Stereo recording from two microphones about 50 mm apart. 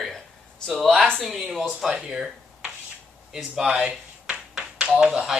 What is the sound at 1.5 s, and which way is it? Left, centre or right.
Speech, centre.